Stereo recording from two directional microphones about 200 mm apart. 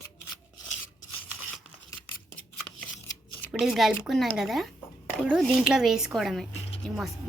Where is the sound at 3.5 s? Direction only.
Centre (ahead or behind).